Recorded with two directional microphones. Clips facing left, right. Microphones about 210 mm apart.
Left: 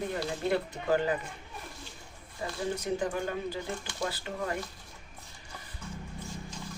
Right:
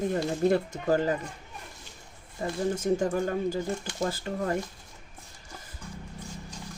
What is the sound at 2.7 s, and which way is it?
Speech, 45° right (ahead or behind).